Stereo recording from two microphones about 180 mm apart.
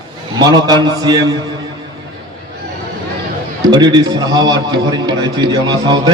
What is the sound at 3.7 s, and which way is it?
A man's voice, 25° right (ahead or behind).